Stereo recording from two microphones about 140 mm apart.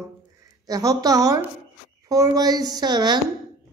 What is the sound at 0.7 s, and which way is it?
A woman's voice, 25° right (ahead or behind).